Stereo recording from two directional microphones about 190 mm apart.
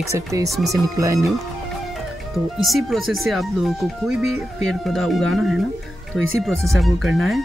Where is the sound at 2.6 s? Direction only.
Centre (ahead or behind).